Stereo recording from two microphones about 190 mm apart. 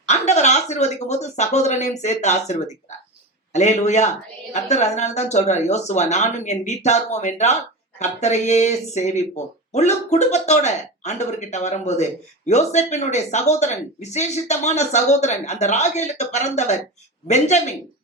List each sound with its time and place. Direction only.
0.1 s speech: 35° left (ahead or behind)